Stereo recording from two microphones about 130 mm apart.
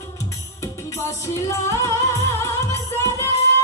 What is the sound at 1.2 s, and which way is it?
Music, 25° left (ahead or behind).